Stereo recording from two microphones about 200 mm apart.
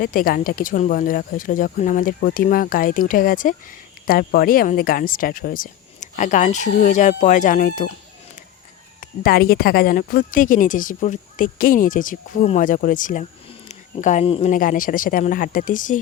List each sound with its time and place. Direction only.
0.0 s speech: 45° left (ahead or behind)
9.0 s speech: 45° left (ahead or behind); by 14.5 s 30° left (ahead or behind)
14.5 s speech: 40° left (ahead or behind)